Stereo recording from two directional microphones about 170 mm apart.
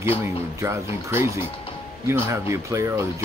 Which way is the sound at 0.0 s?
15° right (ahead or behind).